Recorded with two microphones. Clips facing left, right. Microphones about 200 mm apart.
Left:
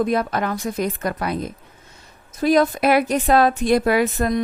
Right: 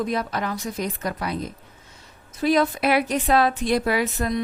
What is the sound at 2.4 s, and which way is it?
A woman's voice, 45° left (ahead or behind).